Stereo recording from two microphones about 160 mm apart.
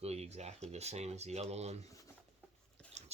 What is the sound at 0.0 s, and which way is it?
Speech, 40° right (ahead or behind).